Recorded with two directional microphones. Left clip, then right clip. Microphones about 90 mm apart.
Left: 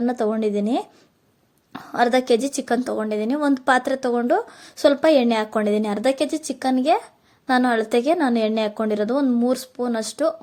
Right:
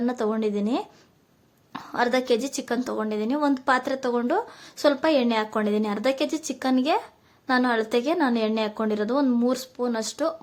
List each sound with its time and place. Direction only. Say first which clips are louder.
0.0 s a woman's voice: left 4 dB; 35° left (ahead or behind)
1.7 s a sound: left 2 dB; 30° left (ahead or behind)
2.0 s a woman's voice: left 5 dB; 45° left (ahead or behind)
7.4 s a woman's voice: left 3 dB; 50° left (ahead or behind)